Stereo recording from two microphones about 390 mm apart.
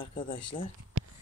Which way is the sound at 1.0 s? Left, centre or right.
Right.